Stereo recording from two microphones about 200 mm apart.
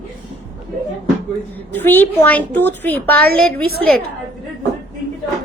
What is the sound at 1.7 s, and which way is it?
A woman's voice, 10° left (ahead or behind).